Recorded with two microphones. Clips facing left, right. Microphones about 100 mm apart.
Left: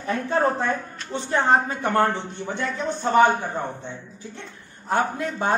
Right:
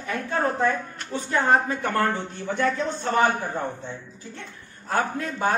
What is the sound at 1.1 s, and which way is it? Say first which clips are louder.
A man's voice: left 1 dB; 25° left (ahead or behind).